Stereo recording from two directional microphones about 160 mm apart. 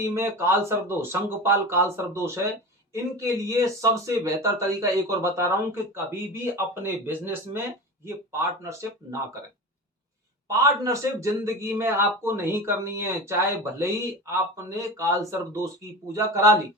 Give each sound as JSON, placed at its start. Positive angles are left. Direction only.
{"t": 0.0, "sound": "speech", "side_deg": -15}
{"t": 2.9, "sound": "speech", "side_deg": -20}
{"t": 10.5, "sound": "speech", "side_deg": -20}